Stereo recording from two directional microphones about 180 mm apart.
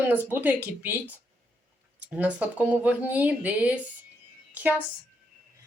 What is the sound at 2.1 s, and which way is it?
A woman's voice, 10° right (ahead or behind).